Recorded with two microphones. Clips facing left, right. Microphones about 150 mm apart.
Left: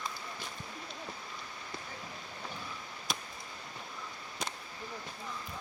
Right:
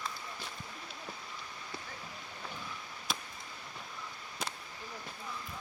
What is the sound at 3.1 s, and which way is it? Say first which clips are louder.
Fireworks: even; centre (ahead or behind).